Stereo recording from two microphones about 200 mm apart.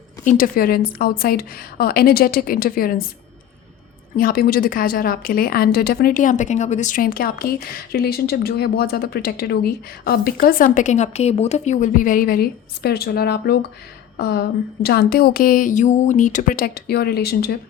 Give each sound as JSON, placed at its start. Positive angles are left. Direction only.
{"t": 0.3, "sound": "a woman's voice", "side_deg": 45}
{"t": 4.2, "sound": "a woman's voice", "side_deg": 50}